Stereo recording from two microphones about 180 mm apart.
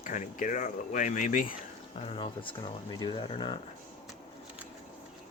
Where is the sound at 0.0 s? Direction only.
45° left (ahead or behind).